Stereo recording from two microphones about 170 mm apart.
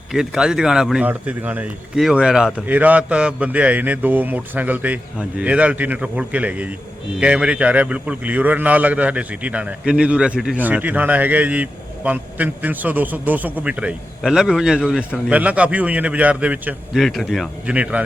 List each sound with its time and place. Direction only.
0.1 s a man's voice: 5° right (ahead or behind)